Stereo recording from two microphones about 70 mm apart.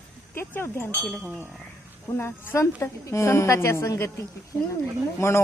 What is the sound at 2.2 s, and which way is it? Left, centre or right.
A woman's voice, left.